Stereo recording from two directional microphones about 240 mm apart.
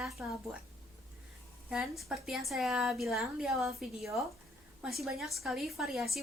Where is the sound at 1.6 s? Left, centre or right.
Centre.